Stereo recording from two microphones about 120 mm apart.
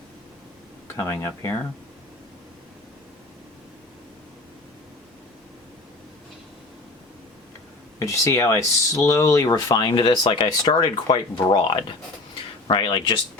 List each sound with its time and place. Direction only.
0.9 s speech: 25° left (ahead or behind)
7.9 s speech: 25° left (ahead or behind)
9.6 s speech: 40° left (ahead or behind)